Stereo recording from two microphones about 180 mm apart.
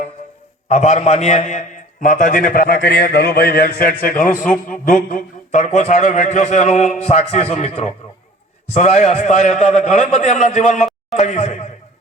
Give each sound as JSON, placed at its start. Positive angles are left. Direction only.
{"t": 0.7, "sound": "a man's voice", "side_deg": 40}